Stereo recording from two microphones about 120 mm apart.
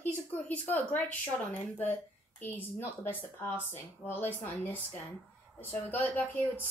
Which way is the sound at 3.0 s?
15° left (ahead or behind).